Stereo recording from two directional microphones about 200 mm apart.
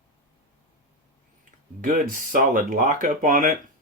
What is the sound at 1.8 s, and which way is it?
Speech, 40° right (ahead or behind).